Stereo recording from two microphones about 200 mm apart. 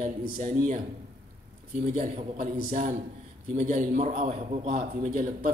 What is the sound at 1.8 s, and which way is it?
A man's voice, 35° right (ahead or behind).